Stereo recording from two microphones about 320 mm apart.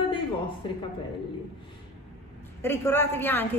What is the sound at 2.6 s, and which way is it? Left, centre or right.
A woman's voice, centre.